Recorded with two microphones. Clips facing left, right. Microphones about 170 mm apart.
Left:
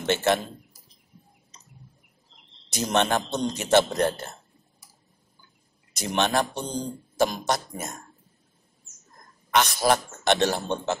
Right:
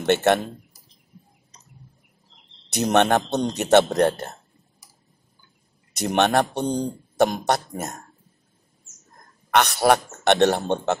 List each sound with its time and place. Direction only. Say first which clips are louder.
0.0 s speech: right 4 dB; 60° right (ahead or behind)
2.7 s speech: right 5 dB; 65° right (ahead or behind)
5.9 s speech: right 5 dB; 60° right (ahead or behind)
9.5 s speech: right 4 dB; 65° right (ahead or behind)